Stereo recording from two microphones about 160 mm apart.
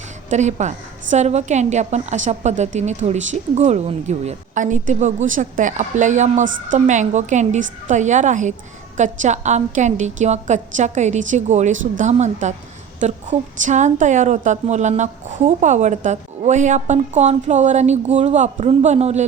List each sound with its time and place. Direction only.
0.3 s a woman's voice: 45° right (ahead or behind)